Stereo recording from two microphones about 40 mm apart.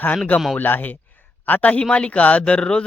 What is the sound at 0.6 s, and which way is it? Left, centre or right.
Speech, left.